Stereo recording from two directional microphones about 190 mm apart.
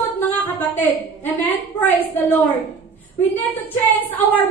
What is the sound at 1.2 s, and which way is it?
A woman's voice, 10° left (ahead or behind).